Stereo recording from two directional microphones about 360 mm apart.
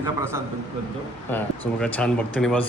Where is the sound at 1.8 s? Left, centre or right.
Centre.